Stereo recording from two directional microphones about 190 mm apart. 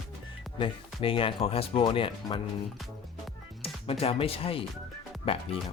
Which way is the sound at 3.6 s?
30° left (ahead or behind).